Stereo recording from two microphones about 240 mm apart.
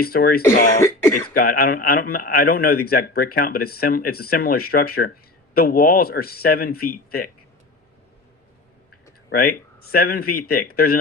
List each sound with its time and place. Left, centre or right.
0.0 s speech: left
0.4 s cough: centre
1.3 s speech: left
9.3 s speech: left